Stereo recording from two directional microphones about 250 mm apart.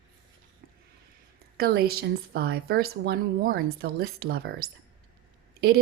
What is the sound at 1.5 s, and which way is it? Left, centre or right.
A woman's voice, right.